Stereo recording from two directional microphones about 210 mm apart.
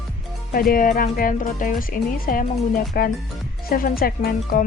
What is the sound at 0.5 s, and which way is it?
Speech, 45° left (ahead or behind).